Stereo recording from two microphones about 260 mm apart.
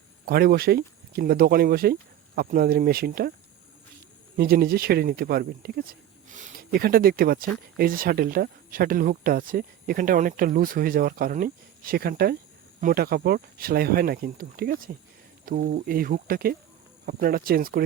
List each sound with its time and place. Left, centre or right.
0.3 s speech: right
4.4 s speech: right